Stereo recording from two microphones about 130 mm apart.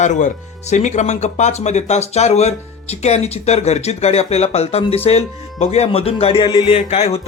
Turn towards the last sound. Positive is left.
turn(degrees=50)  # may be behind; listen again after turning